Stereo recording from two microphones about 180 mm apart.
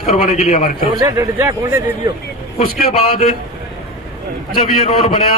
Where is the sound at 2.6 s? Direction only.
35° left (ahead or behind).